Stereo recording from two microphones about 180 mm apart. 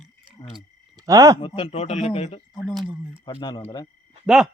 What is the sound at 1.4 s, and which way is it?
Speech, 30° left (ahead or behind).